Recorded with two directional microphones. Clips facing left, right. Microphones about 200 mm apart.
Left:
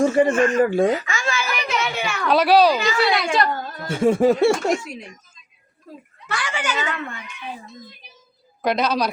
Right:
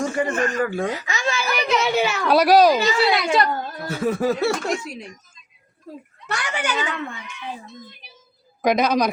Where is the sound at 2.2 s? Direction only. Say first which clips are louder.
Even; 10° right (ahead or behind).